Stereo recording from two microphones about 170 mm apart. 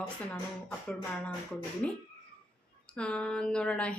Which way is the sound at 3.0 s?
5° left (ahead or behind).